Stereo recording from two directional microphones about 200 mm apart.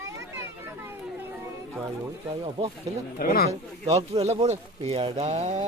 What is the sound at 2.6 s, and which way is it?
Speech, 25° right (ahead or behind).